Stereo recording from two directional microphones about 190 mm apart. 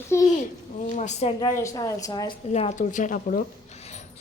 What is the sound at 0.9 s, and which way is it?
Speech, 40° left (ahead or behind).